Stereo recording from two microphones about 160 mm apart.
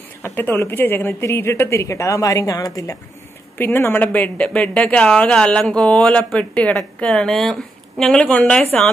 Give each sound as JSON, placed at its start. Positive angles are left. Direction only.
{"t": 0.2, "sound": "speech", "side_deg": 15}